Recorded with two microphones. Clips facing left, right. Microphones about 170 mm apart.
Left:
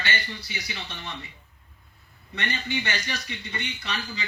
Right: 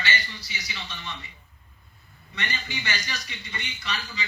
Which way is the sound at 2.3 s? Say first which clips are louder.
Left 4 dB; 60° left (ahead or behind).